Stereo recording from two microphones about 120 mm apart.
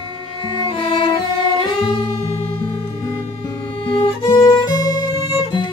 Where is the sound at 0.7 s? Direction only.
45° left (ahead or behind).